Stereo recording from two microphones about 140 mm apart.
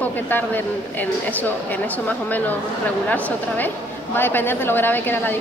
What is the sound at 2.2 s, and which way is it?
Speech, 10° left (ahead or behind).